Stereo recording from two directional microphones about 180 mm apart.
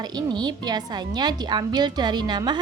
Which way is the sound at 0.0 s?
25° right (ahead or behind).